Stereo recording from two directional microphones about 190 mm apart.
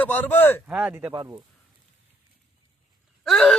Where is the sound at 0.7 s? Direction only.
10° right (ahead or behind).